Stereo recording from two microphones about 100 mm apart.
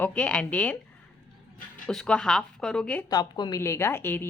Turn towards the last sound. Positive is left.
turn(degrees=20)  # may be behind; listen again after turning